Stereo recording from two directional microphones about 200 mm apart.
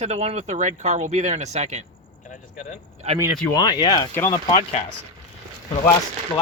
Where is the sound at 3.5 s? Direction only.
20° left (ahead or behind).